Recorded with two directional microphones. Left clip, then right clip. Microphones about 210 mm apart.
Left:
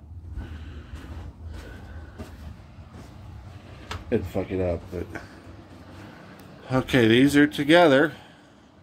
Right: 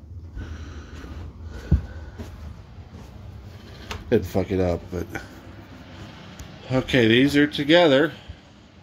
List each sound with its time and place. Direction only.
4.1 s speech: 35° right (ahead or behind)
6.6 s speech: 5° right (ahead or behind)